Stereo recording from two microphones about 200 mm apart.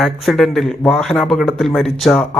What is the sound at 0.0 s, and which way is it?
Speech, centre (ahead or behind).